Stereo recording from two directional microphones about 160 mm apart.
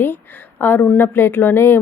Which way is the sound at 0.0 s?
15° left (ahead or behind).